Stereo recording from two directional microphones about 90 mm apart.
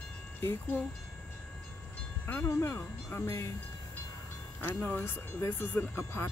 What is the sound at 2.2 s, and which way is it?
Speech, 30° left (ahead or behind).